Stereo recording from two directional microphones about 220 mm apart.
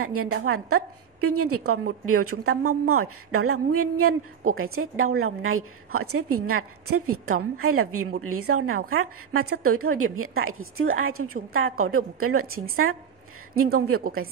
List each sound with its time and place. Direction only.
0.0 s a woman's voice: 80° right